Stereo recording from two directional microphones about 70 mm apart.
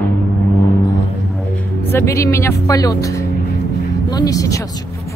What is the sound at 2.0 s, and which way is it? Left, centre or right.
Speech, left.